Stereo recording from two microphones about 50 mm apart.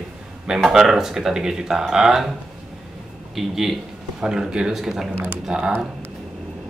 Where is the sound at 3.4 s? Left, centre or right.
Centre.